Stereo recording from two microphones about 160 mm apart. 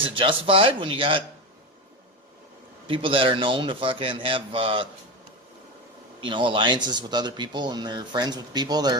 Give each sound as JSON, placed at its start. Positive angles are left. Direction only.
{"t": 0.2, "sound": "a man's voice", "side_deg": -35}
{"t": 2.8, "sound": "a man's voice", "side_deg": -35}
{"t": 6.1, "sound": "speech", "side_deg": -30}